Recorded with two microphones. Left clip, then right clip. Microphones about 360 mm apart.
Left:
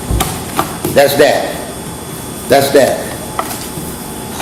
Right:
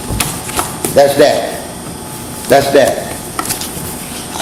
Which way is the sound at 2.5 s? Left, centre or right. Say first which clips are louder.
Even; right.